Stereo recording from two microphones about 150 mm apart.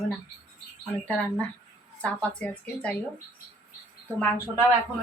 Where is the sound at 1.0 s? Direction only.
10° left (ahead or behind).